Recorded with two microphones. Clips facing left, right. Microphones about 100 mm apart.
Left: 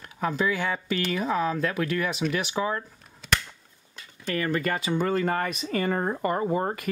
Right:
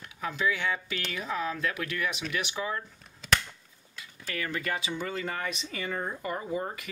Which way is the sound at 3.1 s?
Centre (ahead or behind).